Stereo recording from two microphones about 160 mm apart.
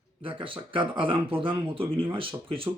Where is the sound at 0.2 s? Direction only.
35° right (ahead or behind).